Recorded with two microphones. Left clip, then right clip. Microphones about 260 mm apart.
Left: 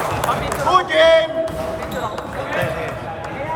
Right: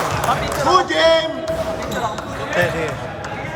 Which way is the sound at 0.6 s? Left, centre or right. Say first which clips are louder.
Left 1 dB; centre.